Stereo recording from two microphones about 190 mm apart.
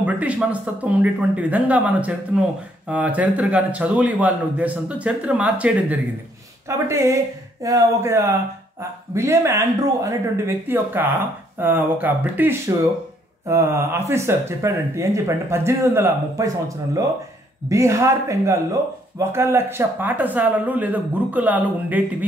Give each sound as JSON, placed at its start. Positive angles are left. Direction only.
{"t": 0.0, "sound": "speech", "side_deg": -5}